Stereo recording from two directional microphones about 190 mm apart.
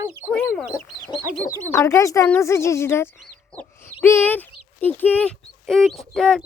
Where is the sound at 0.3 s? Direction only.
Centre (ahead or behind).